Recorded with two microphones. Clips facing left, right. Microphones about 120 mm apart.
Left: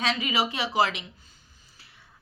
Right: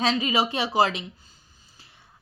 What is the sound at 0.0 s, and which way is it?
A woman's voice, 30° right (ahead or behind).